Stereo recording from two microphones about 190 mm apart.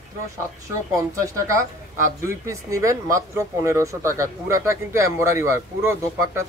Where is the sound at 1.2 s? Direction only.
15° right (ahead or behind).